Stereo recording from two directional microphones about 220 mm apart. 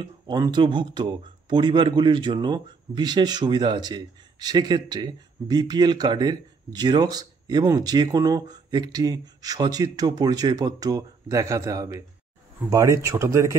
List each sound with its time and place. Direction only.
0.0 s speech: 20° right (ahead or behind)